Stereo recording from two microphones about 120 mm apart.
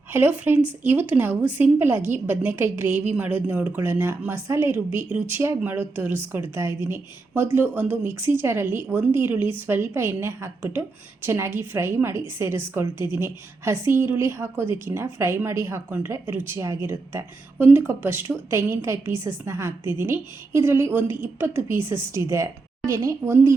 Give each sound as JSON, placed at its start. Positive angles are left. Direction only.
{"t": 0.1, "sound": "a woman's voice", "side_deg": -15}